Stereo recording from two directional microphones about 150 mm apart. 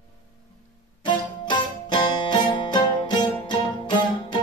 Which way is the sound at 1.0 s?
30° left (ahead or behind).